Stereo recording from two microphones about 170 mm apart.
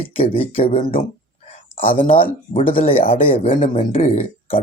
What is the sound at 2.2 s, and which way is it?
Speech, 30° left (ahead or behind).